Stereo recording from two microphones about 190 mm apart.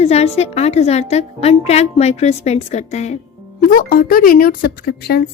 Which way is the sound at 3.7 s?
45° left (ahead or behind).